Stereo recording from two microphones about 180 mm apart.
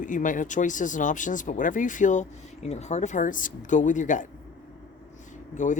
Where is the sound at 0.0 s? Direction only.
45° left (ahead or behind).